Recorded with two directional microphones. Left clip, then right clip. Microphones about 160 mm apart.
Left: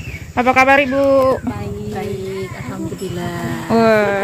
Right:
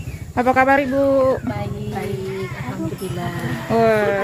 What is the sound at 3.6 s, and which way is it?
Speech, 20° left (ahead or behind).